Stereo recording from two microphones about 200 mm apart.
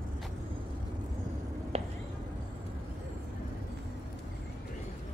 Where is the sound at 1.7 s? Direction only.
30° right (ahead or behind).